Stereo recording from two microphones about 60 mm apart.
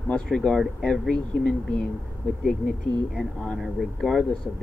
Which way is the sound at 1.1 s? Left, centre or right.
Centre.